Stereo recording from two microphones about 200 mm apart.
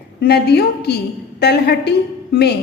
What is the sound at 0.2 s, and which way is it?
A woman's voice, 55° left (ahead or behind).